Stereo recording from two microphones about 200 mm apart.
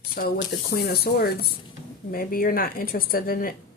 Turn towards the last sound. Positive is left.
turn(degrees=45)  # may be behind; listen again after turning